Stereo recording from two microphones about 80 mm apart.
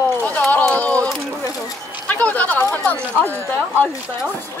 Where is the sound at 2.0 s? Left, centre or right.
Centre.